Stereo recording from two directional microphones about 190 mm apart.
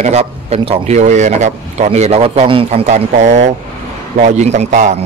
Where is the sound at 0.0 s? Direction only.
35° right (ahead or behind).